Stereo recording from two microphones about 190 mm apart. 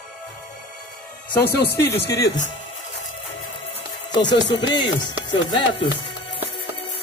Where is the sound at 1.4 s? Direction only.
60° left (ahead or behind).